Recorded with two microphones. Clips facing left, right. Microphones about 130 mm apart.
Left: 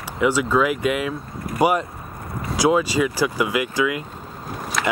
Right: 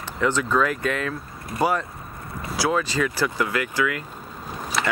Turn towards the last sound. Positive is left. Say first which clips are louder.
# left 2 dB
turn(degrees=0)  # may be behind; listen again after turning